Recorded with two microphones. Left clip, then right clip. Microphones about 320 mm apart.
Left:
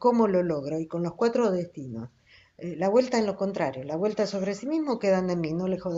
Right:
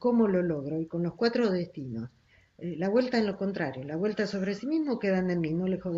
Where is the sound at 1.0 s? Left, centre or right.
Centre.